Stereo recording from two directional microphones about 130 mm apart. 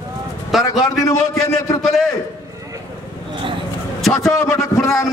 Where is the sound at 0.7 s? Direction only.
25° left (ahead or behind).